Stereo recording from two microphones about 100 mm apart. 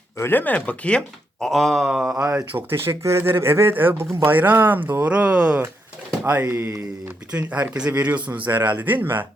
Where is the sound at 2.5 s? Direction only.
25° right (ahead or behind).